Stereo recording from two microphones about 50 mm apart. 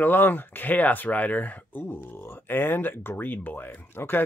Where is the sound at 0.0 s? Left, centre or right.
Left.